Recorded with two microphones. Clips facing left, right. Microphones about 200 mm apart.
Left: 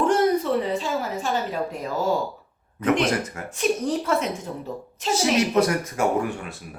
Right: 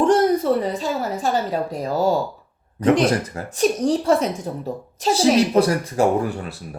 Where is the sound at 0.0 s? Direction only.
40° right (ahead or behind).